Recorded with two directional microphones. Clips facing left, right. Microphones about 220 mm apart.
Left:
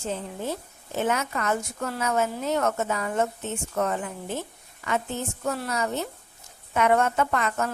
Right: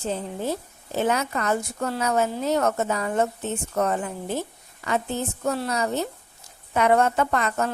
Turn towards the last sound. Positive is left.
turn(degrees=-35)  # may be behind; listen again after turning